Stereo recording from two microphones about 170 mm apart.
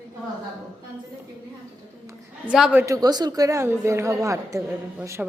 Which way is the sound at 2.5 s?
5° right (ahead or behind).